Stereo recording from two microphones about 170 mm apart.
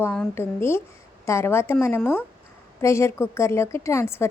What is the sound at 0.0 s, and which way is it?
A woman's voice, 10° left (ahead or behind).